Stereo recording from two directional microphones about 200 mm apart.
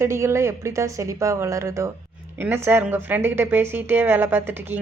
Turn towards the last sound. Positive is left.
turn(degrees=-10)  # may be behind; listen again after turning